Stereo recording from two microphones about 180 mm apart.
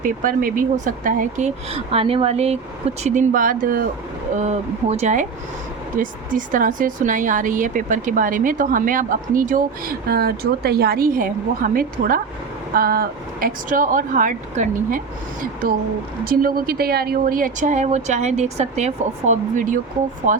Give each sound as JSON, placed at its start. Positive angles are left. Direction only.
{"t": 0.0, "sound": "a woman's voice", "side_deg": -50}
{"t": 4.4, "sound": "a woman's voice", "side_deg": -40}